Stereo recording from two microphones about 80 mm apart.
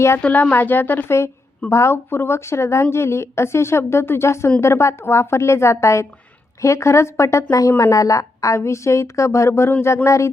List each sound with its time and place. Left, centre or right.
0.2 s a woman's voice: centre
1.7 s a woman's voice: left